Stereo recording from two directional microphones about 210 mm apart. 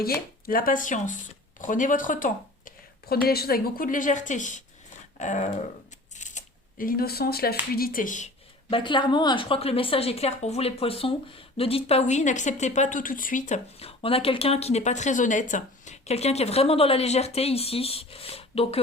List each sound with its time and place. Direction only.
0.0 s a woman's voice: 45° left (ahead or behind)
6.1 s a sound: 35° left (ahead or behind)
7.8 s a woman's voice: 45° left (ahead or behind)
8.7 s a woman's voice: 20° left (ahead or behind)